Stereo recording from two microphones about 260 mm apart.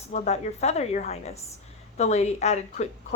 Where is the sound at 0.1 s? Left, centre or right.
Left.